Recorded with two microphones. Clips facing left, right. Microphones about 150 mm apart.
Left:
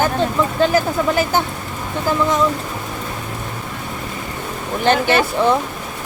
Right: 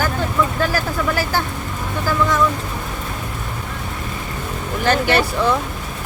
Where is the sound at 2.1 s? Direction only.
20° left (ahead or behind).